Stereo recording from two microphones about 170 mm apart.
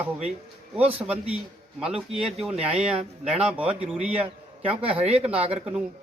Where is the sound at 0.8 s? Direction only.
10° right (ahead or behind).